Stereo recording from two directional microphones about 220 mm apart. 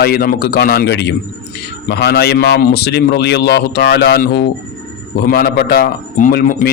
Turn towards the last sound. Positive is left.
turn(degrees=45)  # may be behind; listen again after turning